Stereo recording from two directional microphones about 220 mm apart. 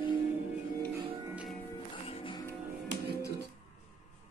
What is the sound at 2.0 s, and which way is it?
Music, 25° left (ahead or behind).